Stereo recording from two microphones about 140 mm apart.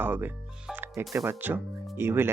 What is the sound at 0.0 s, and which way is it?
Speech, 15° right (ahead or behind).